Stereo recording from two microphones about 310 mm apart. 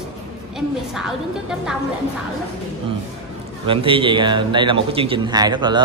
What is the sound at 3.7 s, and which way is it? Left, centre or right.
Speech, centre.